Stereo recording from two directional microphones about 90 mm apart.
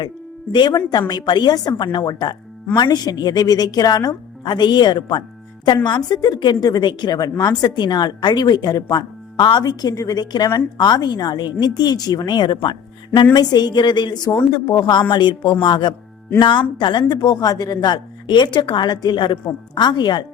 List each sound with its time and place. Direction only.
0.9 s a woman's voice: 50° left (ahead or behind)
13.3 s a woman's voice: 50° left (ahead or behind)